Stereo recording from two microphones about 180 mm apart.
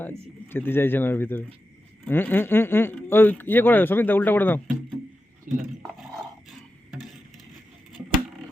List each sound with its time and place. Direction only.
0.5 s speech: 10° left (ahead or behind)
5.5 s speech: 45° right (ahead or behind)